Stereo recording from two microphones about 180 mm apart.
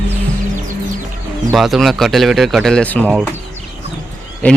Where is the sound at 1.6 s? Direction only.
Centre (ahead or behind).